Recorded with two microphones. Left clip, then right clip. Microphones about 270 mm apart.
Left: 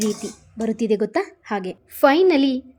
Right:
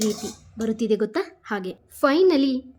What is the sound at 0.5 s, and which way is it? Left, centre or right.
A woman's voice, centre.